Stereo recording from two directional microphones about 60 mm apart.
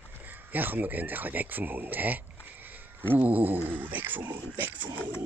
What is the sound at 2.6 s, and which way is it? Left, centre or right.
Speech, right.